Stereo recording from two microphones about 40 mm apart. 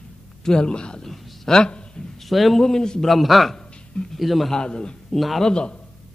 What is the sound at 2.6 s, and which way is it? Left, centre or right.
Speech, centre.